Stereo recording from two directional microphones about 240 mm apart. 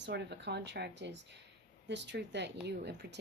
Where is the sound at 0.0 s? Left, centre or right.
Right.